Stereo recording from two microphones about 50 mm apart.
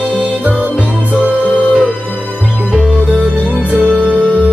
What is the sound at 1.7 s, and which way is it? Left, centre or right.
Music, right.